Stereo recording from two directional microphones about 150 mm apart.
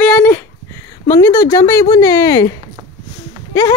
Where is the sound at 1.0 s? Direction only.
25° left (ahead or behind).